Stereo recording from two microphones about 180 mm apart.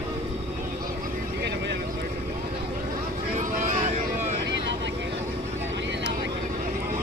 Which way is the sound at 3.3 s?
45° right (ahead or behind).